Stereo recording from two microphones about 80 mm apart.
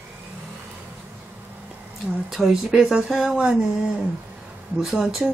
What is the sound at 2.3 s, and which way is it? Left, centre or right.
Speech, centre.